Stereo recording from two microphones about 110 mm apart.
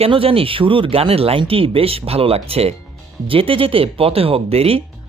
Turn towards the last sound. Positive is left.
turn(degrees=-65)  # may be behind; listen again after turning